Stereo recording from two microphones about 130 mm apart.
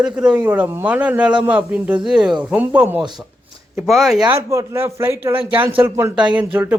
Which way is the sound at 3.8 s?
Centre (ahead or behind).